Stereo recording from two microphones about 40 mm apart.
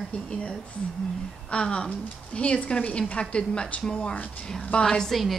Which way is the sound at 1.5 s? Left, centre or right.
Left.